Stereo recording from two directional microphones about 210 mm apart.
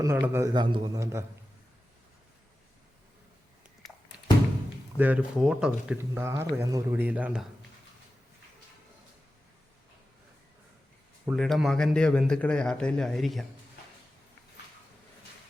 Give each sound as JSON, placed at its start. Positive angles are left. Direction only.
{"t": 0.0, "sound": "speech", "side_deg": -15}
{"t": 4.9, "sound": "speech", "side_deg": -5}
{"t": 11.3, "sound": "a man's voice", "side_deg": 0}